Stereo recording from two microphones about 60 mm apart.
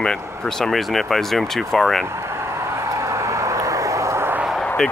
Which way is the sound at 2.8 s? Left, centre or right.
Right.